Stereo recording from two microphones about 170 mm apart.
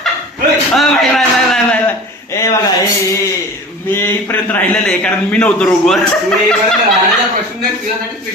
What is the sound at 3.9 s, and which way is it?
A man's voice, 15° left (ahead or behind).